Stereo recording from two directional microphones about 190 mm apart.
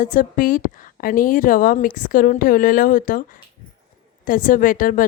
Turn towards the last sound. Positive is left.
turn(degrees=45)  # may be behind; listen again after turning